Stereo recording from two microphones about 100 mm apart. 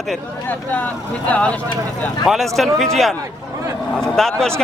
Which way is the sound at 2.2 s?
Centre (ahead or behind).